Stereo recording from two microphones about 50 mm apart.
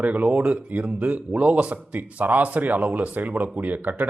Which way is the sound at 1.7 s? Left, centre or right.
Right.